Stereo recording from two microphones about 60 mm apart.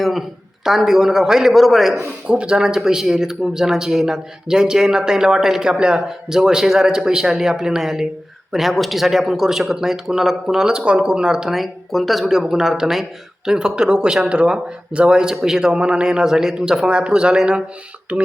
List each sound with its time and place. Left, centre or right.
0.0 s a man's voice: centre
2.2 s speech: centre
2.6 s speech: centre